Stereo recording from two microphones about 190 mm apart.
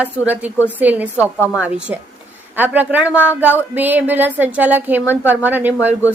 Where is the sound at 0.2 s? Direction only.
20° left (ahead or behind).